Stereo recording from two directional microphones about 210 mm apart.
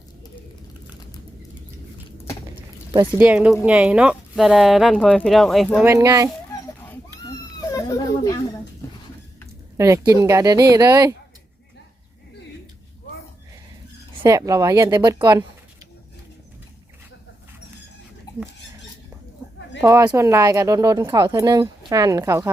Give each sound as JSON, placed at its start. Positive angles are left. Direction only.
{"t": 2.9, "sound": "speech", "side_deg": -20}
{"t": 3.2, "sound": "speech", "side_deg": -5}
{"t": 5.8, "sound": "speech", "side_deg": -15}
{"t": 7.7, "sound": "a sound", "side_deg": 15}
{"t": 9.7, "sound": "speech", "side_deg": -15}
{"t": 14.2, "sound": "speech", "side_deg": -15}
{"t": 19.8, "sound": "speech", "side_deg": -15}